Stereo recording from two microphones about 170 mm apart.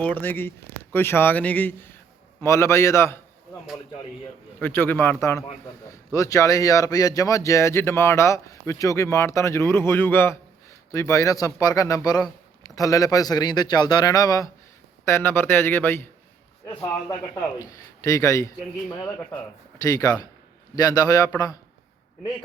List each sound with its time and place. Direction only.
0.0 s a man's voice: 10° left (ahead or behind)
4.6 s speech: 10° left (ahead or behind)